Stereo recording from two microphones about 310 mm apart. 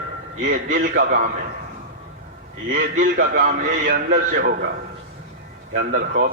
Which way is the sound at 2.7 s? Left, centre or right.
Right.